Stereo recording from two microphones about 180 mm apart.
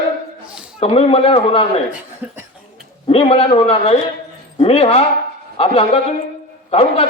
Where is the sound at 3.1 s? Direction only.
30° left (ahead or behind).